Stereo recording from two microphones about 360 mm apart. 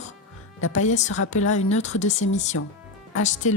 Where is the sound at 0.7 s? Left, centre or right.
Centre.